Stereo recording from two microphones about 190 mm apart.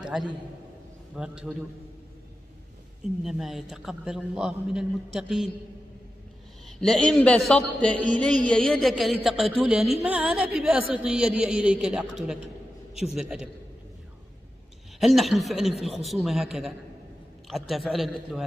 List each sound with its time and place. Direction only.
0.0 s a man's voice: 5° right (ahead or behind)
3.3 s a woman's voice: centre (ahead or behind)
6.8 s a woman's voice: 5° left (ahead or behind)
15.0 s a woman's voice: centre (ahead or behind)